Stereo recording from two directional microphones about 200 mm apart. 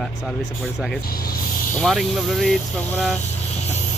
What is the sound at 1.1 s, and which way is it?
Speech, 50° left (ahead or behind).